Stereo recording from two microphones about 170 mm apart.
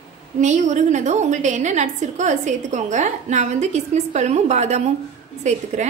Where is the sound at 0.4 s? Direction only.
45° right (ahead or behind).